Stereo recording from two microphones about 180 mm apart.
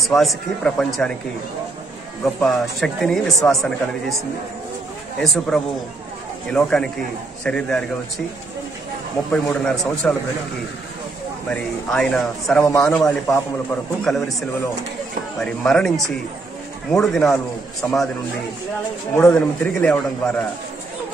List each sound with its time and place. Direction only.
0.0 s a man's voice: centre (ahead or behind)
2.2 s a man's voice: centre (ahead or behind)
5.2 s a man's voice: centre (ahead or behind)
9.3 s a man's voice: 5° left (ahead or behind)
11.4 s a man's voice: 5° left (ahead or behind)
15.4 s a man's voice: 5° left (ahead or behind)
16.9 s a man's voice: centre (ahead or behind)
19.1 s a man's voice: 5° left (ahead or behind)